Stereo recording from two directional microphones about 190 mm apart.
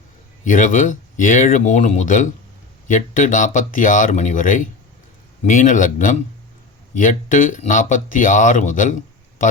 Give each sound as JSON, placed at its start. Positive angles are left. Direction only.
{"t": 0.4, "sound": "speech", "side_deg": 45}